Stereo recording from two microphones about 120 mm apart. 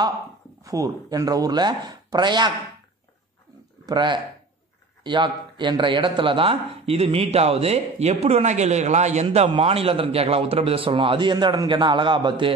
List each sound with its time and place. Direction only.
0.7 s speech: 30° right (ahead or behind)
3.8 s a man's voice: 40° right (ahead or behind)